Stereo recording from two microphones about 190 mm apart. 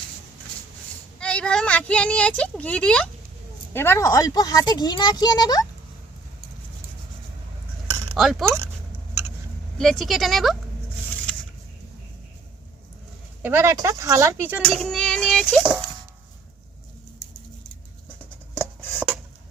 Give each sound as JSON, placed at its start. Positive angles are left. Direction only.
{"t": 1.2, "sound": "a woman's voice", "side_deg": 5}
{"t": 8.1, "sound": "speech", "side_deg": 0}
{"t": 9.7, "sound": "speech", "side_deg": 0}
{"t": 13.4, "sound": "a child's voice", "side_deg": -10}
{"t": 18.5, "sound": "a sound", "side_deg": -10}